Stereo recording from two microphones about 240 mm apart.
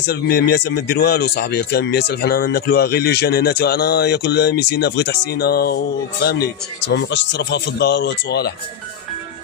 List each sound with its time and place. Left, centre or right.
0.0 s speech: left